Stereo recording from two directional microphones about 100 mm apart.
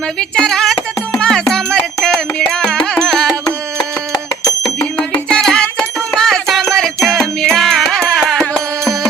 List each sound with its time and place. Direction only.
0.2 s music: 5° left (ahead or behind)
4.1 s bicycle bell: 35° left (ahead or behind)
4.9 s music: 15° left (ahead or behind)
5.4 s music: 5° left (ahead or behind)